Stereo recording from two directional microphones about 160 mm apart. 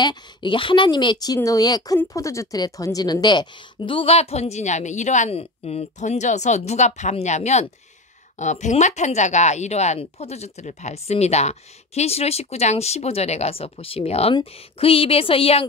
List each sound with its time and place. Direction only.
0.0 s speech: 30° left (ahead or behind)